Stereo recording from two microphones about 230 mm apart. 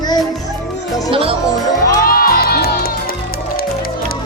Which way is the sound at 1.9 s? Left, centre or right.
Left.